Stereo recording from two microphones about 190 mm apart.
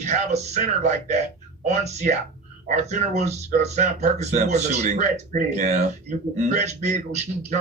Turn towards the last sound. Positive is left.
turn(degrees=-35)  # may be behind; listen again after turning